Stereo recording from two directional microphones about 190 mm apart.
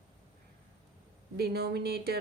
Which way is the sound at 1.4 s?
55° right (ahead or behind).